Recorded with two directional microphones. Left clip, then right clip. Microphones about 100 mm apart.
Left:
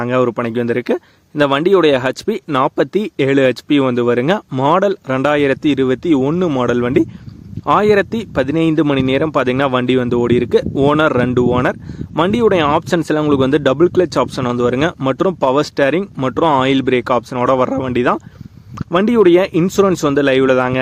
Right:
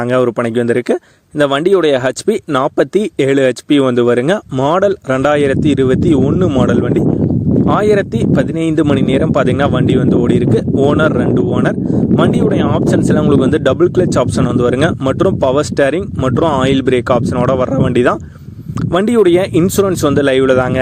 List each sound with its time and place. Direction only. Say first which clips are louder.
0.1 s speech: right 3 dB; 35° right (ahead or behind)
18.9 s speech: even; 55° right (ahead or behind)
19.6 s speech: right 1 dB; 40° right (ahead or behind)